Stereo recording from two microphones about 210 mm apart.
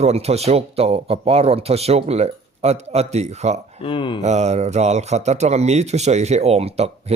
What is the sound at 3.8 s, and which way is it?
Speech, 25° left (ahead or behind).